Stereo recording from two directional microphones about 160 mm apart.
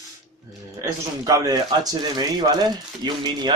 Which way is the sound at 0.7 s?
20° right (ahead or behind).